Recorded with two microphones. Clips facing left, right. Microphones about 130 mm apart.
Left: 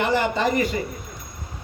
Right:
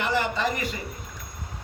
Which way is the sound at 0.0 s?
35° left (ahead or behind).